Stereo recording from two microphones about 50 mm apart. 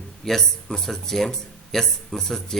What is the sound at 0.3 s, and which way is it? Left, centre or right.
Speech, centre.